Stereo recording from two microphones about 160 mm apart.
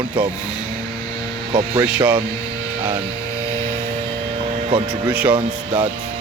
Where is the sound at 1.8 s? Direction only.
5° right (ahead or behind).